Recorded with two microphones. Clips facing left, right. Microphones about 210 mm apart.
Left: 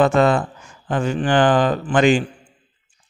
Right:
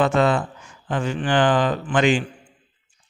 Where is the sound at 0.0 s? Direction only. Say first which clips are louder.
Left 3 dB; 45° left (ahead or behind).